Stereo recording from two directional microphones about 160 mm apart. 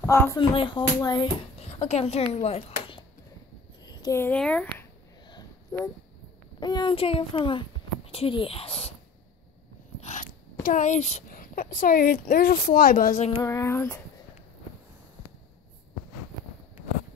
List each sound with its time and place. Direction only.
0.0 s speech: 15° left (ahead or behind)
0.4 s speech: 30° left (ahead or behind)
1.7 s a woman's voice: 40° left (ahead or behind)
3.8 s a sound: 20° left (ahead or behind)
4.4 s speech: 5° left (ahead or behind)
5.3 s a sound: 25° left (ahead or behind)
6.6 s a child's voice: 25° left (ahead or behind)
9.9 s biting: 45° left (ahead or behind)
10.6 s a woman's voice: 50° left (ahead or behind)
13.4 s a sound: 20° left (ahead or behind)